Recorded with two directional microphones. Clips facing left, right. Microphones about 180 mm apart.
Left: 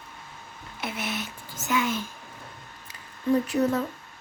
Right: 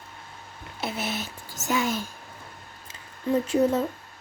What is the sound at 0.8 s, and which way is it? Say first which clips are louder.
Speech: right 2 dB; 30° right (ahead or behind).